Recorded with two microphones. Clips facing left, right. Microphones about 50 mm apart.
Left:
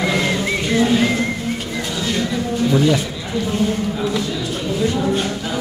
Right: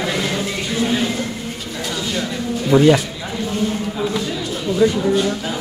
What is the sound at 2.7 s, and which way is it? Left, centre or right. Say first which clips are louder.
Speech: right 5 dB; right.